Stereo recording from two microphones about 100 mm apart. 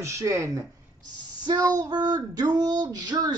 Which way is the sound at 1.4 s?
40° right (ahead or behind).